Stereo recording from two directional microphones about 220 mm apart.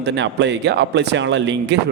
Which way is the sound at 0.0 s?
50° right (ahead or behind).